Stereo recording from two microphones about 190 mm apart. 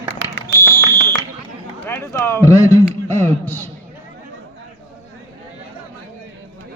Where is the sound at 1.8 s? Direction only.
10° left (ahead or behind).